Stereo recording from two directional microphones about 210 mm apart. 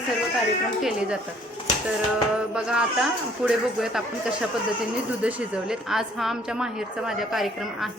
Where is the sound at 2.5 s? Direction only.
5° right (ahead or behind).